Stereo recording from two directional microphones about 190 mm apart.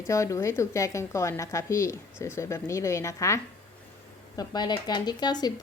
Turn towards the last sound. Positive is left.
turn(degrees=20)  # may be behind; listen again after turning